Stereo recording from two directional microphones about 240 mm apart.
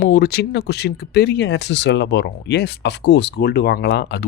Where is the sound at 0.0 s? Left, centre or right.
Left.